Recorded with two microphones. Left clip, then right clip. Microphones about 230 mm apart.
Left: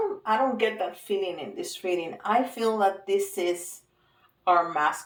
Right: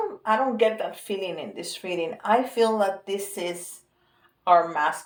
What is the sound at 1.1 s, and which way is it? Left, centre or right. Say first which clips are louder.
Speech: left 1 dB; right.